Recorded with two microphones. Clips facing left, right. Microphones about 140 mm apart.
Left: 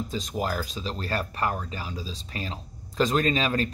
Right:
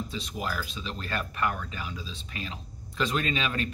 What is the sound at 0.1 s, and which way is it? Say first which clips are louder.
Speech: left 5 dB; 40° left (ahead or behind).